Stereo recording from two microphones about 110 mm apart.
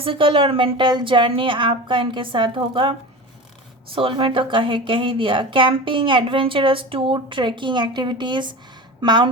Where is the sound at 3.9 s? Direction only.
55° right (ahead or behind).